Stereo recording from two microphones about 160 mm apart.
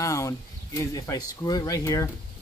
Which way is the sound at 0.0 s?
20° left (ahead or behind).